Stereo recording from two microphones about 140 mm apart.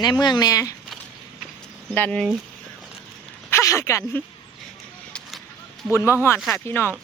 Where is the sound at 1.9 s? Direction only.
10° left (ahead or behind).